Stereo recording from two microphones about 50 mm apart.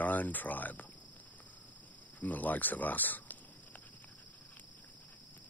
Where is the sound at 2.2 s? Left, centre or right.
Left.